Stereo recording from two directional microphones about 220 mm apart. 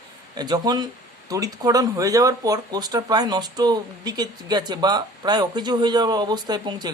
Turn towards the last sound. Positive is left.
turn(degrees=-20)  # may be behind; listen again after turning